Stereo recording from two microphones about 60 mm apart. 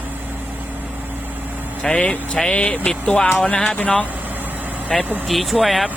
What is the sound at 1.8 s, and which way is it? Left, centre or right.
Speech, centre.